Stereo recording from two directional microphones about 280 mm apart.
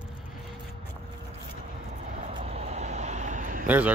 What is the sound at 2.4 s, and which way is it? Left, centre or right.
Vehicle, right.